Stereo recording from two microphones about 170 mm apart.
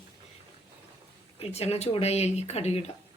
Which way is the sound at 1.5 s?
40° left (ahead or behind).